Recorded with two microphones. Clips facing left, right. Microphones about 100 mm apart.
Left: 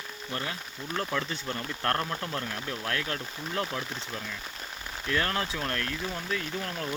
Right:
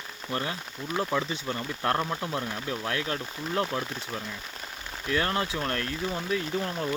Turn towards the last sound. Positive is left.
turn(degrees=-20)  # may be behind; listen again after turning